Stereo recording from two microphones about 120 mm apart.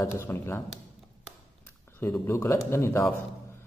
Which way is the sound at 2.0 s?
20° left (ahead or behind).